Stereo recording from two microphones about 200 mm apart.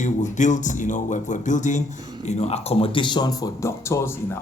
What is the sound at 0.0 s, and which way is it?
Speech, 40° left (ahead or behind).